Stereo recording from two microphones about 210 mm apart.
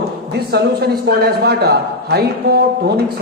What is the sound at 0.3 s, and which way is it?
A man's voice, 50° right (ahead or behind).